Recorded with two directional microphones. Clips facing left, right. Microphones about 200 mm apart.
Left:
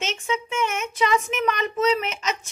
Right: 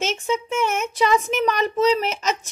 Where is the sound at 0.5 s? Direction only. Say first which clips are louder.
Right 4 dB; 40° right (ahead or behind).